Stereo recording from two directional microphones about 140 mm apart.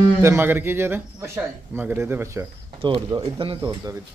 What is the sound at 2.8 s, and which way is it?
Speech, 35° right (ahead or behind).